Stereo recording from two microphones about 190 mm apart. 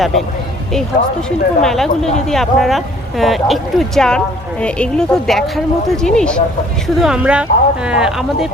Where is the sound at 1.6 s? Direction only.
Centre (ahead or behind).